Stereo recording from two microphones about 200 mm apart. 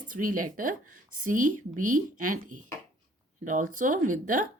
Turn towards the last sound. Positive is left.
turn(degrees=-40)  # may be behind; listen again after turning